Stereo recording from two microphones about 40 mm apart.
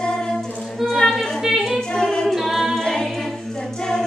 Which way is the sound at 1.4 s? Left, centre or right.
Centre.